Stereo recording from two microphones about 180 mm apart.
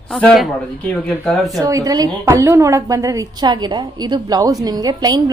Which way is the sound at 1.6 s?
20° right (ahead or behind).